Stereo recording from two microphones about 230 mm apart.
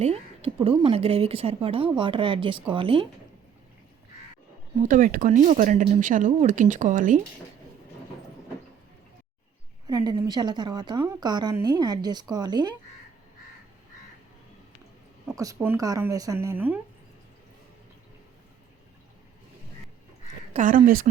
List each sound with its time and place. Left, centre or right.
0.0 s speech: right
4.8 s speech: right
9.8 s a woman's voice: centre
15.4 s a woman's voice: centre
20.5 s speech: right